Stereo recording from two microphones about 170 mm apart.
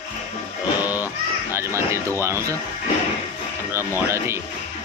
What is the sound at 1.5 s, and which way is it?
Speech, 15° right (ahead or behind).